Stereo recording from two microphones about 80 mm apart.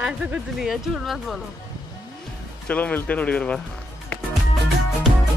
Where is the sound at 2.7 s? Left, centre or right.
Centre.